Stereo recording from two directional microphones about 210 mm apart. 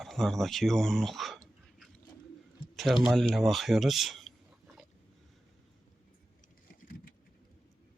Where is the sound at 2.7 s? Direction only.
Centre (ahead or behind).